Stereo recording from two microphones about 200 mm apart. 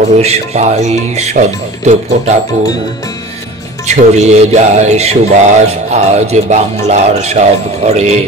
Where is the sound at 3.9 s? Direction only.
35° right (ahead or behind).